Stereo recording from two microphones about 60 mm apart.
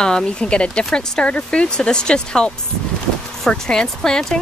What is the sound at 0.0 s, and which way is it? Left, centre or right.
A woman's voice, centre.